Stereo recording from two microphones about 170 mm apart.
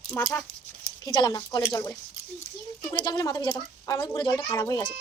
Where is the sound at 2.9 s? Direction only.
25° left (ahead or behind).